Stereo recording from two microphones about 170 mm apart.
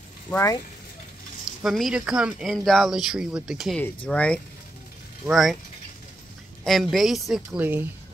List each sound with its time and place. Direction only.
0.3 s speech: 15° left (ahead or behind)
1.6 s speech: centre (ahead or behind)
6.6 s speech: centre (ahead or behind)